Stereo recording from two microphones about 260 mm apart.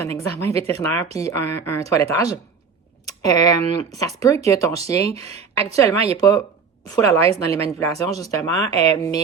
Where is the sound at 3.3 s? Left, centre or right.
Centre.